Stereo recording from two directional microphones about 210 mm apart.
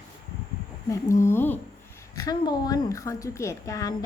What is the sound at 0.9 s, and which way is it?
A woman's voice, 15° left (ahead or behind).